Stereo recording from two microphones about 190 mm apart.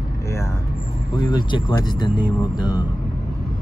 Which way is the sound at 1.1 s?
25° left (ahead or behind).